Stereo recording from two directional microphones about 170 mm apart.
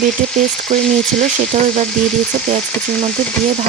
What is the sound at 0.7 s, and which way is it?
Speech, 45° right (ahead or behind).